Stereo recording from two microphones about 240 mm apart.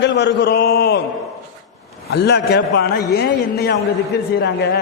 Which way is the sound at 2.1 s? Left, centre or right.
Left.